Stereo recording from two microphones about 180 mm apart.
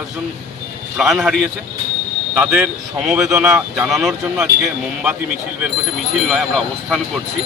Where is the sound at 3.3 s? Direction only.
15° right (ahead or behind).